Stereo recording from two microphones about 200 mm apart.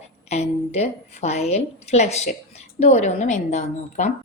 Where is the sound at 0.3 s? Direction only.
30° left (ahead or behind).